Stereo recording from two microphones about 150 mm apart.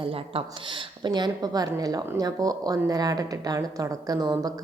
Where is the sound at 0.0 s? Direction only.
35° right (ahead or behind).